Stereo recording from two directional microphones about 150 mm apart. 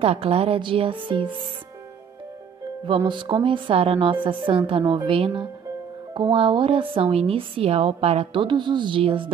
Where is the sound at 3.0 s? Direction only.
30° right (ahead or behind).